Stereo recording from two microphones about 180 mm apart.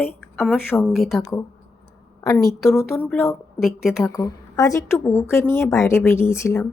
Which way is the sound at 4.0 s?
15° left (ahead or behind).